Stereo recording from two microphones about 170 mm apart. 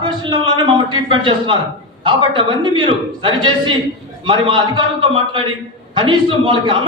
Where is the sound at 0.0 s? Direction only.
30° right (ahead or behind).